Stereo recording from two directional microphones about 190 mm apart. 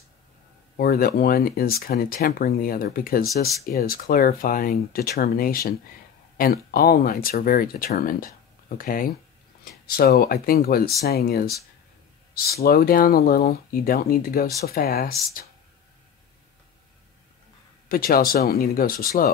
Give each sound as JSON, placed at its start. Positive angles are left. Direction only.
{"t": 0.7, "sound": "speech", "side_deg": 50}
{"t": 17.8, "sound": "speech", "side_deg": 50}